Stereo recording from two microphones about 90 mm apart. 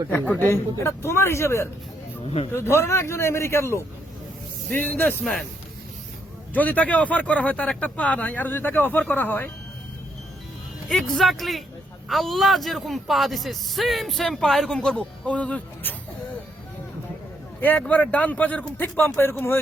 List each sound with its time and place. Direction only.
0.4 s a man's voice: 30° left (ahead or behind)
5.2 s a man's voice: 5° left (ahead or behind)
6.5 s speech: 15° left (ahead or behind)
10.8 s a man's voice: 5° left (ahead or behind)
17.6 s speech: 20° left (ahead or behind)